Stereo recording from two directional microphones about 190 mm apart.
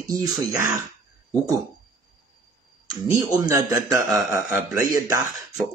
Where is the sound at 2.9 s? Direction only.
20° right (ahead or behind).